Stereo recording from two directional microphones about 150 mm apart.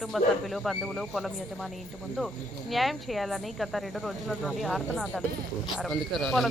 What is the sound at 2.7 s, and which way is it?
Speech, centre (ahead or behind).